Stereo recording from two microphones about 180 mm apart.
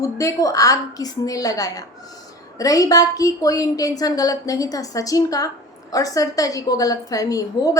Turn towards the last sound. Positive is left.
turn(degrees=20)  # may be behind; listen again after turning